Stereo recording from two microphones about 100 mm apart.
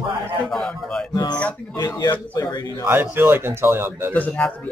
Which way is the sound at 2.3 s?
40° left (ahead or behind).